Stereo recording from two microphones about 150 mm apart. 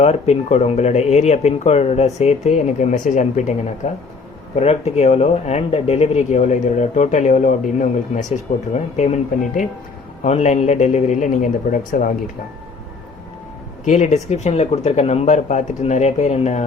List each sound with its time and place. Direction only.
0.0 s speech: 45° left (ahead or behind)
10.2 s speech: 50° left (ahead or behind); by 12.1 s 65° left (ahead or behind)
13.8 s speech: 50° left (ahead or behind)